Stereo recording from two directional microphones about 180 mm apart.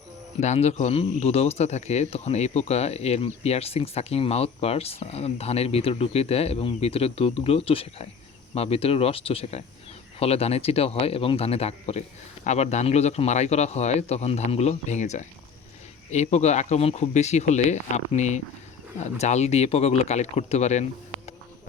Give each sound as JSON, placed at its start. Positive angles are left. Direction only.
{"t": 0.3, "sound": "speech", "side_deg": 40}